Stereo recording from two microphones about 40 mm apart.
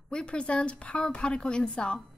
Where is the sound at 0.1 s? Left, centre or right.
Left.